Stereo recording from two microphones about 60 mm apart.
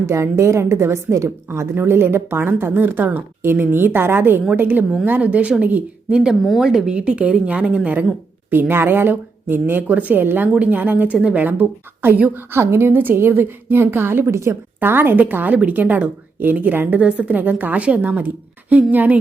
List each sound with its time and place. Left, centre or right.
0.0 s a woman's voice: right
1.7 s a woman's voice: right
6.6 s a woman's voice: centre
8.4 s a woman's voice: right
11.2 s a woman's voice: centre
12.0 s a woman's voice: right
14.3 s a woman's voice: right
14.8 s a woman's voice: right
17.0 s a woman's voice: right